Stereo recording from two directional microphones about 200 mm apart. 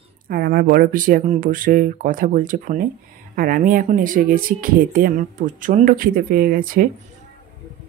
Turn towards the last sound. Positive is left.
turn(degrees=-45)  # may be behind; listen again after turning